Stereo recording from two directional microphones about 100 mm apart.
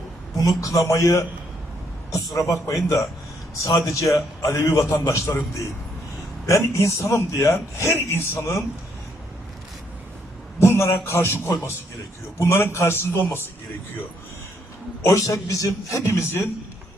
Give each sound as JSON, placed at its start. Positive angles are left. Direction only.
{"t": 0.3, "sound": "a man's voice", "side_deg": 35}
{"t": 2.3, "sound": "a man's voice", "side_deg": 35}
{"t": 6.4, "sound": "speech", "side_deg": 30}
{"t": 10.6, "sound": "speech", "side_deg": 25}
{"t": 15.0, "sound": "a man's voice", "side_deg": 30}